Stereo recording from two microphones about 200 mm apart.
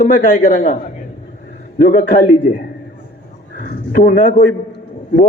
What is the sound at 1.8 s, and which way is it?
Speech, 40° left (ahead or behind).